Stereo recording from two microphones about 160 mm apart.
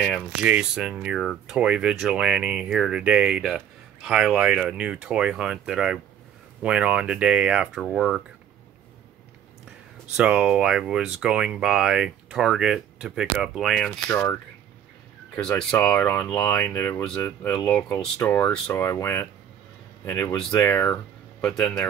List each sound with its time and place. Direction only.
0.0 s speech: 5° left (ahead or behind)
0.4 s speech: 5° right (ahead or behind)
10.1 s speech: 5° right (ahead or behind)
13.8 s speech: 15° left (ahead or behind)
17.6 s speech: 5° left (ahead or behind)